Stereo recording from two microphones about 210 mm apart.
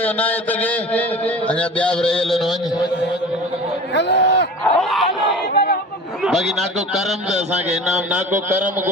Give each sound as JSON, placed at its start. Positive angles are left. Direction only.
{"t": 0.0, "sound": "a man's voice", "side_deg": 10}
{"t": 3.9, "sound": "speech", "side_deg": 55}
{"t": 4.8, "sound": "crowd", "side_deg": 0}
{"t": 5.5, "sound": "a sound", "side_deg": 45}
{"t": 6.2, "sound": "a man's voice", "side_deg": 0}